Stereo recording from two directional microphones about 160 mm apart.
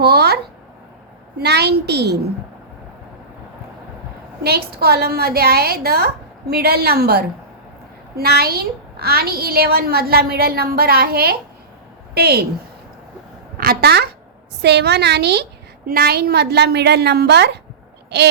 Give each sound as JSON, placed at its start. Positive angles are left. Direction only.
{"t": 0.0, "sound": "a sound", "side_deg": -90}
{"t": 1.4, "sound": "a woman's voice", "side_deg": -90}
{"t": 4.4, "sound": "a woman's voice", "side_deg": -75}
{"t": 13.6, "sound": "a sound", "side_deg": -75}
{"t": 14.6, "sound": "a woman's voice", "side_deg": -90}
{"t": 15.9, "sound": "a woman's voice", "side_deg": -75}